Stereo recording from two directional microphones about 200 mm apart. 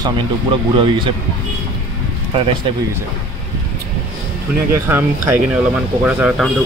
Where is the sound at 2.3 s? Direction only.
25° right (ahead or behind).